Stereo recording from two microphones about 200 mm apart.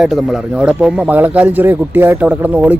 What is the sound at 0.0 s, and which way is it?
Speech, centre (ahead or behind).